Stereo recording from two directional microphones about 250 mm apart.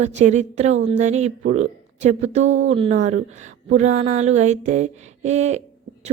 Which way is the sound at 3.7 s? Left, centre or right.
Right.